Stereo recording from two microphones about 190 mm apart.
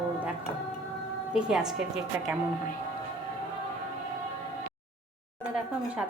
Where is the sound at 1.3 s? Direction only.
5° right (ahead or behind).